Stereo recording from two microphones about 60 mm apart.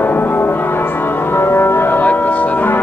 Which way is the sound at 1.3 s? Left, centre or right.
Left.